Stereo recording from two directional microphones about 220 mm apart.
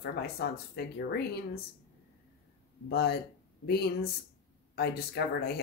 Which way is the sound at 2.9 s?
45° left (ahead or behind).